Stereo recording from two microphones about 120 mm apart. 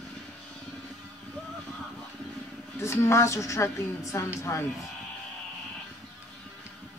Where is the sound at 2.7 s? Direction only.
25° left (ahead or behind).